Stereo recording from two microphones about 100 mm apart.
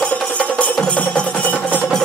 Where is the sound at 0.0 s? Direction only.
10° left (ahead or behind).